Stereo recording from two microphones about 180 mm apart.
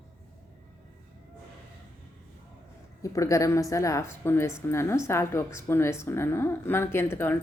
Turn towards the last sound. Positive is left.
turn(degrees=10)  # may be behind; listen again after turning